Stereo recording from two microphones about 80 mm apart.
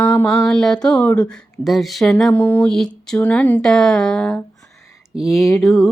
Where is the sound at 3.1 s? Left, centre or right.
Centre.